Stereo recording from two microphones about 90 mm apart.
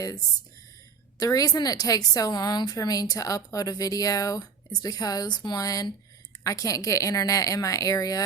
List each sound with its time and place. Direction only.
1.2 s speech: 45° left (ahead or behind)